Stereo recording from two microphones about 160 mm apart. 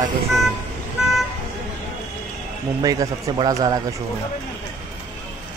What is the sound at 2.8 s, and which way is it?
Speech, 25° right (ahead or behind).